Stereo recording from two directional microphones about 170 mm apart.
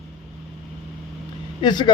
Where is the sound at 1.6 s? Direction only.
25° left (ahead or behind).